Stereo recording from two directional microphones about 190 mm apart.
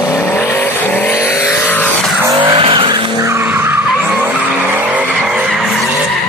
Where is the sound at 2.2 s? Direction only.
25° right (ahead or behind).